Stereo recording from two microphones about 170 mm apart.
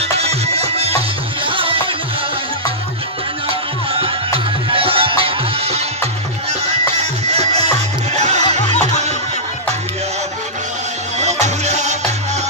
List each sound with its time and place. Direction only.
0.2 s music: 35° right (ahead or behind)
3.4 s music: 35° right (ahead or behind)
7.2 s music: 40° right (ahead or behind)
11.1 s music: 40° right (ahead or behind)